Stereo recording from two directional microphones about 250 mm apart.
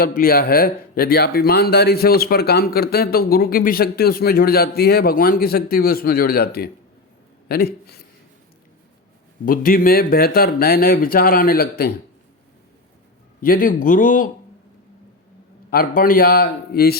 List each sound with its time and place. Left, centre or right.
0.0 s speech: left
9.5 s speech: left
13.4 s speech: left
16.0 s speech: left